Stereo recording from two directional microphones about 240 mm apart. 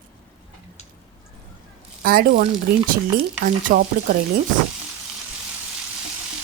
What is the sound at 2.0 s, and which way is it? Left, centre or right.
A woman's voice, right.